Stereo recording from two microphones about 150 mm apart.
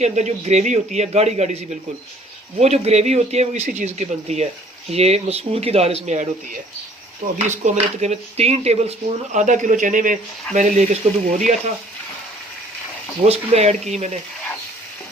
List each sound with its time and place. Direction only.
0.0 s speech: 50° right (ahead or behind)
13.2 s speech: 45° right (ahead or behind)